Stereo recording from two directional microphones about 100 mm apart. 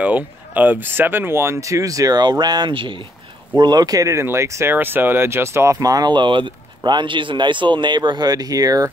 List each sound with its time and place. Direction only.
0.0 s speech: 15° right (ahead or behind); by 3.0 s 55° right (ahead or behind)
3.5 s speech: 45° right (ahead or behind)